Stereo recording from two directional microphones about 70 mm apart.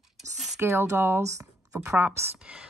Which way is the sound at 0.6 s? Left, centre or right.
Right.